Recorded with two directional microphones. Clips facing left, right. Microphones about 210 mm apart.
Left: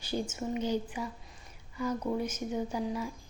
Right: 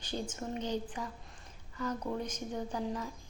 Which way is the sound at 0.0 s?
10° left (ahead or behind).